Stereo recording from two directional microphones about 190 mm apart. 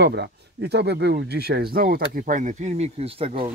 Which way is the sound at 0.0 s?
60° right (ahead or behind).